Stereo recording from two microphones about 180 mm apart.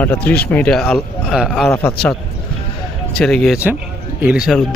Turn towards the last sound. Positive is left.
turn(degrees=0)  # may be behind; listen again after turning